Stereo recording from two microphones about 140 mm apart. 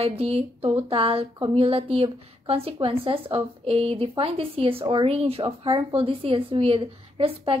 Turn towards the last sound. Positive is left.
turn(degrees=-40)  # may be behind; listen again after turning